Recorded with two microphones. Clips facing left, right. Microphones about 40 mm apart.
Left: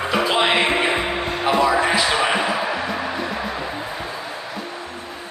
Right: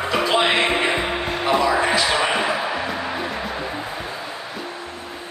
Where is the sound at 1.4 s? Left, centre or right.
Centre.